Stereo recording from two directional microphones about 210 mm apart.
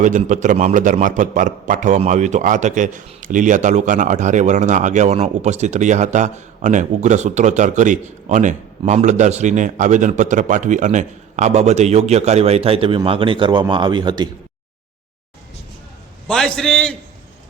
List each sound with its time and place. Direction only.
0.0 s a man's voice: 35° right (ahead or behind)
16.2 s a man's voice: centre (ahead or behind)